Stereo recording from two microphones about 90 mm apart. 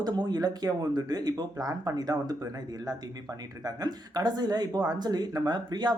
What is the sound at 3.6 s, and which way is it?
Speech, 45° right (ahead or behind).